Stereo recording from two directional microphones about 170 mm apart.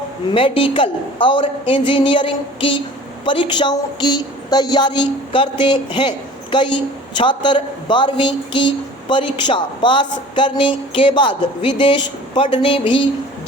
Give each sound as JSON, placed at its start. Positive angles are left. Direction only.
{"t": 0.3, "sound": "a woman's voice", "side_deg": 30}